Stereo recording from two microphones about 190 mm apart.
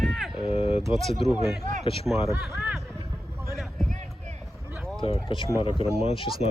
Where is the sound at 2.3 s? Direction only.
10° right (ahead or behind).